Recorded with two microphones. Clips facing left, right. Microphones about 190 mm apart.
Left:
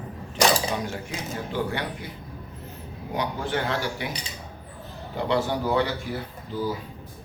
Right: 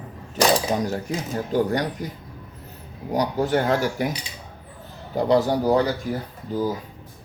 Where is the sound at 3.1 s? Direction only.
40° right (ahead or behind).